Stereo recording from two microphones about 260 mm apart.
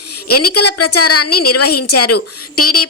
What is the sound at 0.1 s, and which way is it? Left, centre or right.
Speech, left.